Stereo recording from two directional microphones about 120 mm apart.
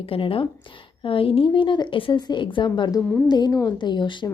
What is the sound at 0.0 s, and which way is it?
A woman's voice, 50° left (ahead or behind).